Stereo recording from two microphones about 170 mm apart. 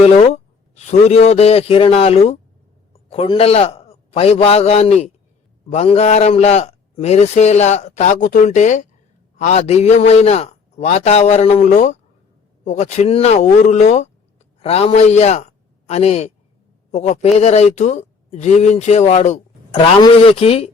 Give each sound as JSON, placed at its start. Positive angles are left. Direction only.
{"t": 0.7, "sound": "a man's voice", "side_deg": 40}